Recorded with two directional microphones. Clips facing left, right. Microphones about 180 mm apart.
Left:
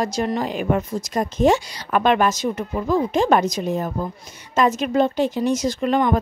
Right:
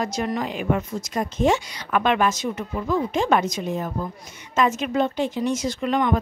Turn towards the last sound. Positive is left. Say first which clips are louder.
# left 3 dB
turn(degrees=35)  # may be behind; listen again after turning